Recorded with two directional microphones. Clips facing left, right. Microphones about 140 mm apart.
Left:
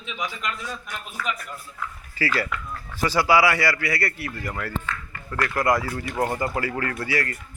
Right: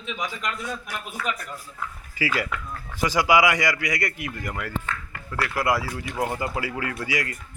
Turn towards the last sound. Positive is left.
turn(degrees=-15)  # may be behind; listen again after turning